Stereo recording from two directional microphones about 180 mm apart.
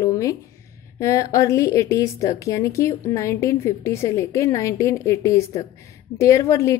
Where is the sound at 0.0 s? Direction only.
20° left (ahead or behind).